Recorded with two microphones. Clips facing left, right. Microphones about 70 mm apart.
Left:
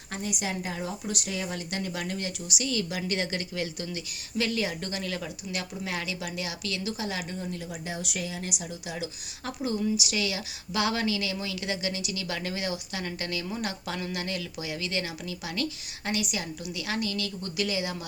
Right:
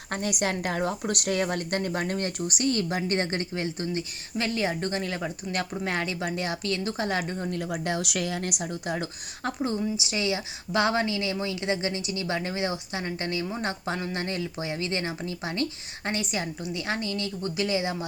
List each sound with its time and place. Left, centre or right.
0.1 s a woman's voice: right